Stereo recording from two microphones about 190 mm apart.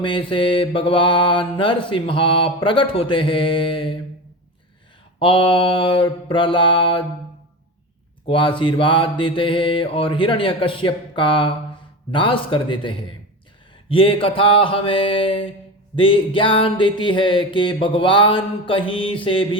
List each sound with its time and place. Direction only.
0.0 s mantra: 25° left (ahead or behind)
5.2 s mantra: 25° left (ahead or behind)
8.3 s mantra: 25° left (ahead or behind)